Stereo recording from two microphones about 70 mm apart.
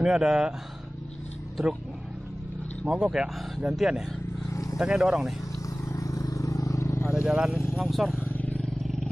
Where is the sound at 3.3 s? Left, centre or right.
Centre.